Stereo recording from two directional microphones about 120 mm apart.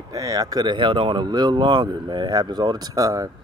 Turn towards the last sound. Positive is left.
turn(degrees=-30)  # may be behind; listen again after turning